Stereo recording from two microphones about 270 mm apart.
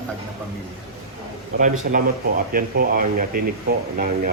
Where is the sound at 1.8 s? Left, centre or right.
Right.